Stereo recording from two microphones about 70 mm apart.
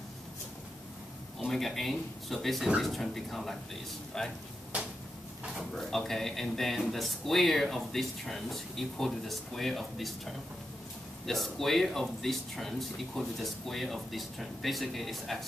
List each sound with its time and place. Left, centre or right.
1.5 s a man's voice: centre
4.7 s a sound: centre
5.6 s a man's voice: centre